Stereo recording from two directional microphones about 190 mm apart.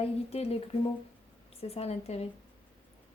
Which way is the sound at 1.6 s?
30° left (ahead or behind).